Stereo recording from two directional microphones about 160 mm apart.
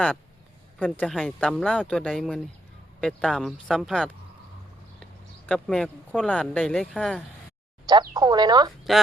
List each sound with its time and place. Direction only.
0.9 s speech: centre (ahead or behind)
5.5 s speech: 5° left (ahead or behind)
7.9 s speech: 25° right (ahead or behind)